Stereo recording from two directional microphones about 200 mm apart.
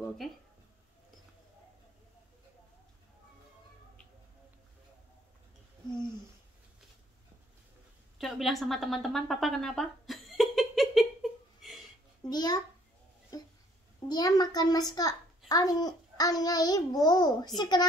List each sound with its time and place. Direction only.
8.2 s a woman's voice: centre (ahead or behind)
12.3 s a child's voice: 20° left (ahead or behind)
13.3 s a sound: 20° left (ahead or behind)
14.0 s a child's voice: 20° left (ahead or behind)